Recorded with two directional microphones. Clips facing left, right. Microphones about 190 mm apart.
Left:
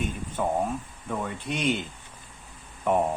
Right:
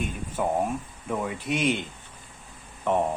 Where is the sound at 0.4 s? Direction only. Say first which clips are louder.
Right 1 dB; 10° right (ahead or behind).